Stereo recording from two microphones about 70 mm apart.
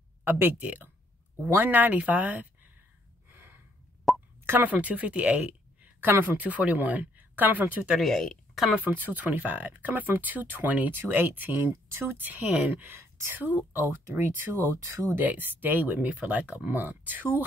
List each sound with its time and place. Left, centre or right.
0.2 s speech: right
3.3 s gasp: right
4.1 s plop: centre
4.5 s a woman's voice: right
8.0 s speech: centre
8.8 s speech: right
11.7 s speech: right
12.2 s speech: right